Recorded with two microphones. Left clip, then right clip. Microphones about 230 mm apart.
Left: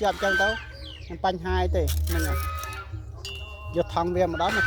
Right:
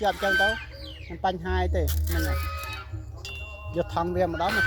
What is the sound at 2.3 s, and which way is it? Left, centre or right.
Music, right.